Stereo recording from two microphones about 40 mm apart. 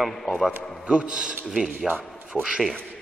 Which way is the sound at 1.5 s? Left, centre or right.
Centre.